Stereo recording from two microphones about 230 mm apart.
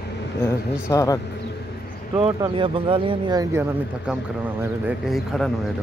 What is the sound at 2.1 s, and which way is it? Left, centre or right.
Speech, centre.